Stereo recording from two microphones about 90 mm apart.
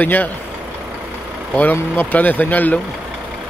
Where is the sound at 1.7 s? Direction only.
20° left (ahead or behind).